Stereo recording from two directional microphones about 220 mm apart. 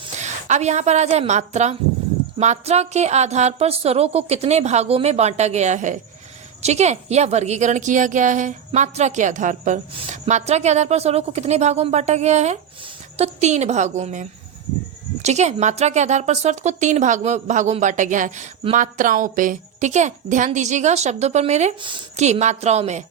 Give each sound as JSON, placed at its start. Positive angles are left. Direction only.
{"t": 0.0, "sound": "a woman's voice", "side_deg": -30}